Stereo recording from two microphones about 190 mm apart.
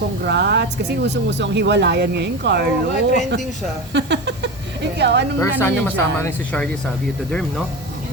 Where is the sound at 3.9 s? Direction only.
70° right (ahead or behind).